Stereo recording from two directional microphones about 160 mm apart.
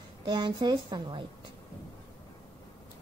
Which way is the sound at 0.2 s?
30° right (ahead or behind).